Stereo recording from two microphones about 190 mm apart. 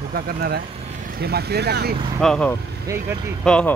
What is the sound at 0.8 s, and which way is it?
Speech, 45° right (ahead or behind).